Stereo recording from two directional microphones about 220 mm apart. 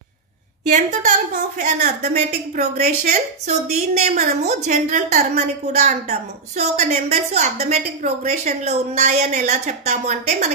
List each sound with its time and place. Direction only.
0.7 s a woman's voice: 35° right (ahead or behind)